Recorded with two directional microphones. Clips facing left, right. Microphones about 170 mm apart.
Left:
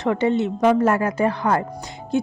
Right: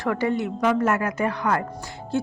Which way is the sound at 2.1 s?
15° left (ahead or behind).